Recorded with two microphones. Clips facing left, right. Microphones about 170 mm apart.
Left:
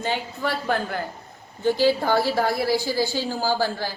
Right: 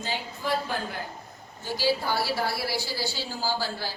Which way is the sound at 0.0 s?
65° left (ahead or behind).